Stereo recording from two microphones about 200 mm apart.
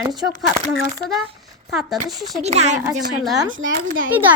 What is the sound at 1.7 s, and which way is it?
Speech, centre (ahead or behind).